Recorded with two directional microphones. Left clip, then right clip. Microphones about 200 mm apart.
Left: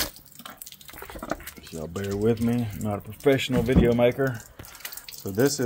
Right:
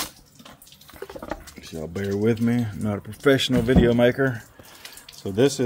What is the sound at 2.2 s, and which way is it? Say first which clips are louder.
Speech: right 1 dB; 25° right (ahead or behind).